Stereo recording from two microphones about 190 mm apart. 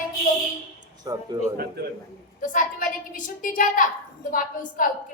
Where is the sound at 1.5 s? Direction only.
55° right (ahead or behind).